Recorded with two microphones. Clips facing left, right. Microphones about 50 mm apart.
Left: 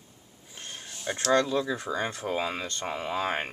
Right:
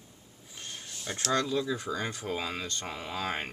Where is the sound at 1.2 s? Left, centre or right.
Left.